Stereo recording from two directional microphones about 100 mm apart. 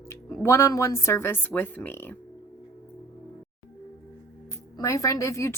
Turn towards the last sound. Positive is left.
turn(degrees=30)  # may be behind; listen again after turning